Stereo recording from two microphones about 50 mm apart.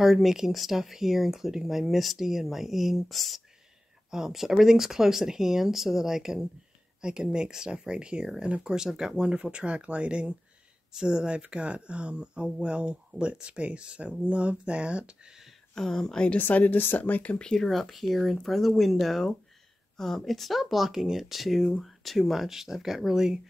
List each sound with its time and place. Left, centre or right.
0.0 s speech: centre; by 15.3 s right
15.7 s speech: centre
16.3 s speech: left
17.4 s speech: centre
17.6 s speech: centre